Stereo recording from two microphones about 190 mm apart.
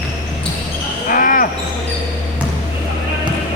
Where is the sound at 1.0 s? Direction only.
45° left (ahead or behind).